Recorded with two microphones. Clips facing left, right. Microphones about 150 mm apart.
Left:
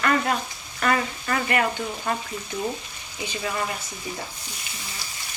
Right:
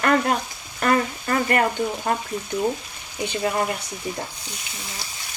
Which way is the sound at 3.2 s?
55° right (ahead or behind).